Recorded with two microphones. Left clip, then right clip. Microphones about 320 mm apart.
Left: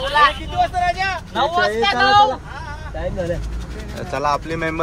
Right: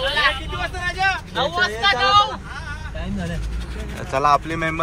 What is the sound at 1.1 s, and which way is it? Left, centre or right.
Vehicle, left.